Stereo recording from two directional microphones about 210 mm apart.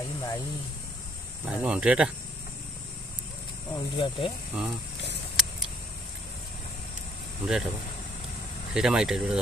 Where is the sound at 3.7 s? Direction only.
20° left (ahead or behind).